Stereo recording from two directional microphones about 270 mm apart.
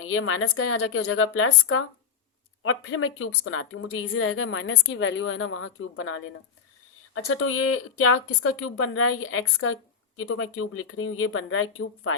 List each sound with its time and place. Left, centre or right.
0.0 s a woman's voice: left